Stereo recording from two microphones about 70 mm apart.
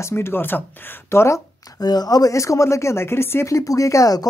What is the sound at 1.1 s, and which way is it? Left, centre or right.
Speech, left.